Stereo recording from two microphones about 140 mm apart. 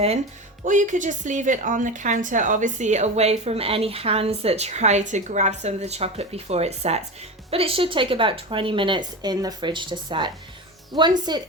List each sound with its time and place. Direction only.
0.6 s a woman's voice: 65° right (ahead or behind); by 11.4 s 30° right (ahead or behind)